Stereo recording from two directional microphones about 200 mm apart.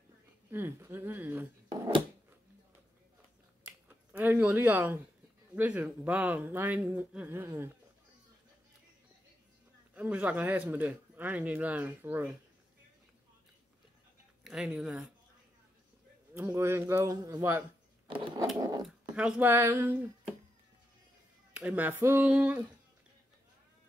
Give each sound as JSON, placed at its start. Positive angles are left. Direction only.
{"t": 0.5, "sound": "a man's voice", "side_deg": -10}
{"t": 1.7, "sound": "a sound", "side_deg": -20}
{"t": 4.2, "sound": "a man's voice", "side_deg": -10}
{"t": 9.9, "sound": "a man's voice", "side_deg": -5}
{"t": 14.4, "sound": "speech", "side_deg": -5}
{"t": 16.3, "sound": "a man's voice", "side_deg": -10}
{"t": 18.0, "sound": "sewing machine", "side_deg": -25}
{"t": 18.8, "sound": "speech", "side_deg": -5}
{"t": 21.5, "sound": "a man's voice", "side_deg": -10}